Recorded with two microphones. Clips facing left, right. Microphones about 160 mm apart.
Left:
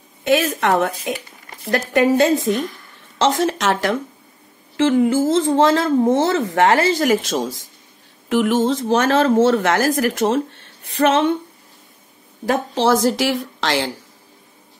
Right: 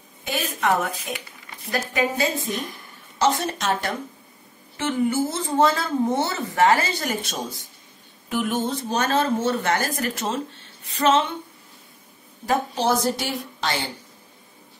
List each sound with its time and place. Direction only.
0.2 s a woman's voice: 85° left; by 2.5 s 70° left (ahead or behind)
3.2 s speech: 90° left; by 11.2 s 60° left (ahead or behind)
12.4 s speech: 90° left